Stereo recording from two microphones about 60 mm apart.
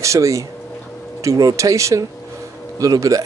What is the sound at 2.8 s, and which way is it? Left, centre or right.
Speech, right.